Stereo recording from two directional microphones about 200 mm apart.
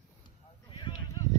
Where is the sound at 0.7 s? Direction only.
25° left (ahead or behind).